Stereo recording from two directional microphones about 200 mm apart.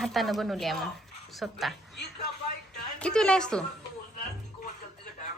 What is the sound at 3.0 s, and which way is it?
Speech, 5° left (ahead or behind).